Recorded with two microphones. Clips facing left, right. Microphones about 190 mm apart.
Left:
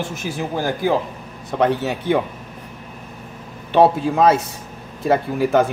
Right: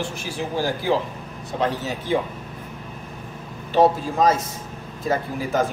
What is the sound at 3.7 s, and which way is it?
A man's voice, 60° left (ahead or behind).